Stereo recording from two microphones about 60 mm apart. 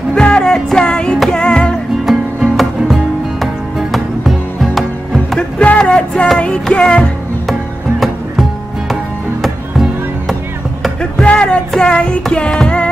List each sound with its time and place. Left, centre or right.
0.1 s music: centre
2.0 s music: centre
5.6 s a sound: centre
6.2 s music: centre
8.0 s music: centre
11.2 s a sound: centre
11.7 s child singing: centre
12.3 s music: centre